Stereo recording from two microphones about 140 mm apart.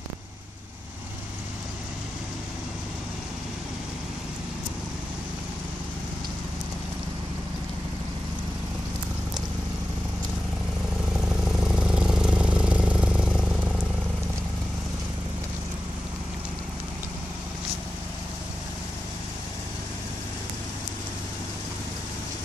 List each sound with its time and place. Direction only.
11.1 s vehicle: 5° right (ahead or behind)